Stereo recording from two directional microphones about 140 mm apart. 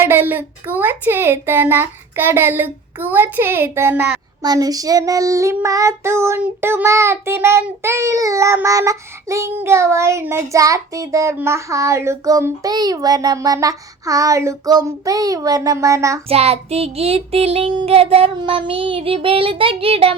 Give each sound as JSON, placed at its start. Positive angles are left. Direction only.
{"t": 0.0, "sound": "speech", "side_deg": -15}
{"t": 4.4, "sound": "child singing", "side_deg": -25}
{"t": 16.3, "sound": "child singing", "side_deg": -45}